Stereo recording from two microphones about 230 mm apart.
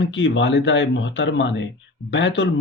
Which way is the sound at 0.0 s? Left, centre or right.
Left.